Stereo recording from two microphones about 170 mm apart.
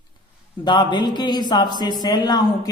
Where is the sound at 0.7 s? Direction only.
25° left (ahead or behind).